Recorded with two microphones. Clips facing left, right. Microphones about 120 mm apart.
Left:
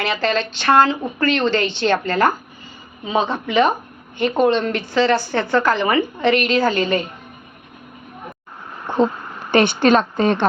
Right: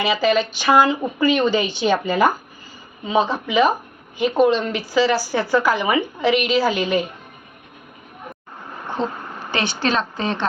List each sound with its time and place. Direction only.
0.0 s a woman's voice: 10° right (ahead or behind)
9.5 s a woman's voice: 55° left (ahead or behind)